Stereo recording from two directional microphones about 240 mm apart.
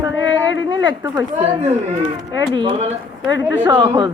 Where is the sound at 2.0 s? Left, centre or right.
Centre.